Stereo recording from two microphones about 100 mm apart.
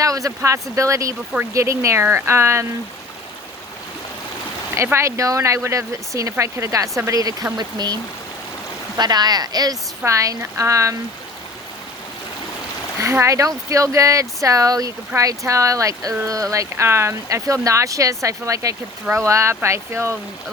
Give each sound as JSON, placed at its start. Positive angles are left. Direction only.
{"t": 0.0, "sound": "speech", "side_deg": -35}
{"t": 4.8, "sound": "speech", "side_deg": -25}
{"t": 9.0, "sound": "speech", "side_deg": -45}
{"t": 13.0, "sound": "speech", "side_deg": -30}